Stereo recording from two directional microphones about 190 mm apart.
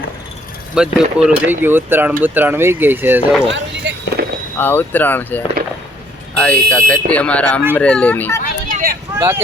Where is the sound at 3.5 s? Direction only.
70° right (ahead or behind).